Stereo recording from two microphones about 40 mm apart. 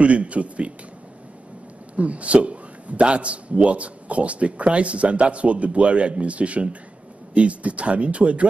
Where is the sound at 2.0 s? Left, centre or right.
Right.